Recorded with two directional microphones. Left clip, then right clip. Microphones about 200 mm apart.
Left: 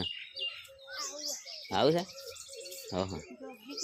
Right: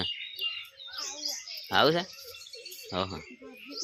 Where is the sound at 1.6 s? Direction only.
Centre (ahead or behind).